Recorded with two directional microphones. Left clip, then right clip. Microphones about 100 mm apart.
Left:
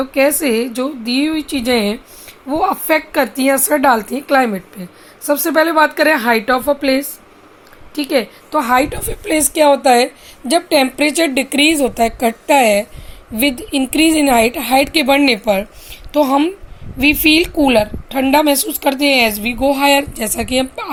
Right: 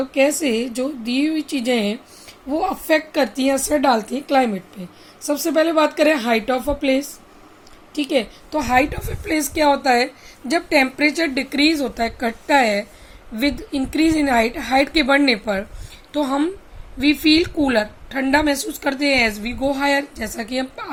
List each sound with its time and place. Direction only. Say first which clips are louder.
0.0 s a woman's voice: left 4 dB; 25° left (ahead or behind)
7.9 s a woman's voice: left 4 dB; 30° left (ahead or behind)
8.7 s a woman's voice: left 1 dB; 55° left (ahead or behind)
11.0 s a woman's voice: left 5 dB; 20° right (ahead or behind)
11.7 s a woman's voice: left 7 dB; 50° left (ahead or behind)
13.5 s a woman's voice: left 6 dB; 40° left (ahead or behind)
14.2 s a woman's voice: left 5 dB; 55° left (ahead or behind)